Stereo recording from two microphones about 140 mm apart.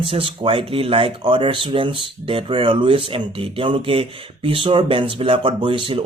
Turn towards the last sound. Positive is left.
turn(degrees=-40)  # may be behind; listen again after turning